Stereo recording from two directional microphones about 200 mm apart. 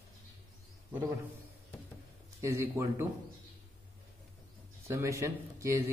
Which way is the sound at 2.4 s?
15° right (ahead or behind).